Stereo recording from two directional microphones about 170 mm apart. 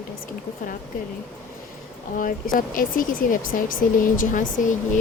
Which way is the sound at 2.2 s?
55° left (ahead or behind).